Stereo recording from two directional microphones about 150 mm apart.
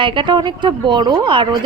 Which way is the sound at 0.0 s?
35° right (ahead or behind).